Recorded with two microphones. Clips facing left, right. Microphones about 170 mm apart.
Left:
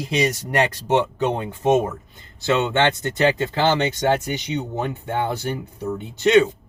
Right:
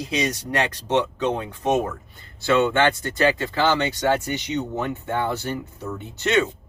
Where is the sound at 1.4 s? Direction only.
25° left (ahead or behind).